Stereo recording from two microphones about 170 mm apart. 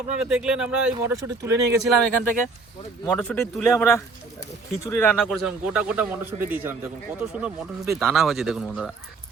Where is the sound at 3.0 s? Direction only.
10° left (ahead or behind).